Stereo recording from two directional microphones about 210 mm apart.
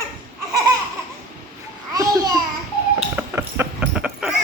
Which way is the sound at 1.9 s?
15° right (ahead or behind).